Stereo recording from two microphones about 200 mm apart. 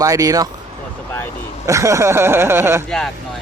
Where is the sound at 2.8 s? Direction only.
5° left (ahead or behind).